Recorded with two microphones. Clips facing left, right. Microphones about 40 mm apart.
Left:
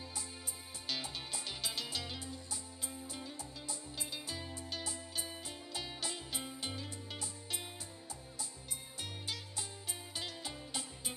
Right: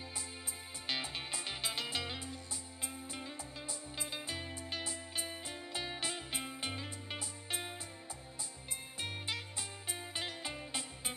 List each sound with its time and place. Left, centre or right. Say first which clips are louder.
0.8 s music: right 2 dB; right
9.0 s music: right 4 dB; right